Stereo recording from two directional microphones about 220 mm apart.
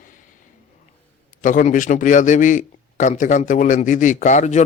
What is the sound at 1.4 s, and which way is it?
A man's voice, 35° left (ahead or behind).